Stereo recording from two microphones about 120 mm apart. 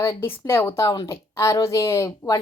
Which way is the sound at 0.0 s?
20° left (ahead or behind).